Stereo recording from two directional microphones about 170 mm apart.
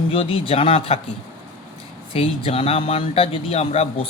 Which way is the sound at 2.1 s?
35° left (ahead or behind).